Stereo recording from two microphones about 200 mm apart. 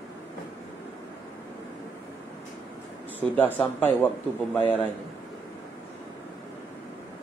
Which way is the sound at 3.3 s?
5° left (ahead or behind).